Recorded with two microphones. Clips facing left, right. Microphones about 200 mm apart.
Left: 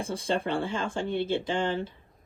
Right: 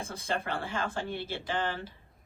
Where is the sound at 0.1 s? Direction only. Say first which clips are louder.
Left 6 dB; 30° left (ahead or behind).